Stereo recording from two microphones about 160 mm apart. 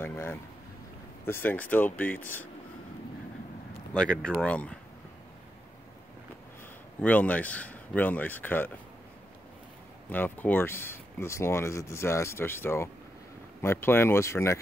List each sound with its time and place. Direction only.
0.0 s speech: 15° left (ahead or behind)
3.9 s speech: 5° left (ahead or behind)
7.0 s speech: 10° left (ahead or behind)
10.0 s speech: 10° left (ahead or behind)